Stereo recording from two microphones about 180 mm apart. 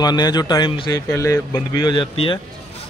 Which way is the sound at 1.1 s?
15° left (ahead or behind).